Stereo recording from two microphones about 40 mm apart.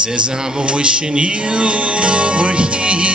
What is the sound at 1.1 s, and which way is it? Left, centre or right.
Music, right.